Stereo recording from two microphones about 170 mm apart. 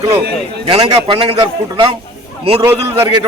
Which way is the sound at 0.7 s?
30° right (ahead or behind).